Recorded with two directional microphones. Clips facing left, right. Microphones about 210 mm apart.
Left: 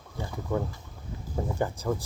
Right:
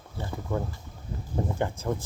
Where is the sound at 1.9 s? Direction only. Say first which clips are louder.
Left 1 dB; 15° right (ahead or behind).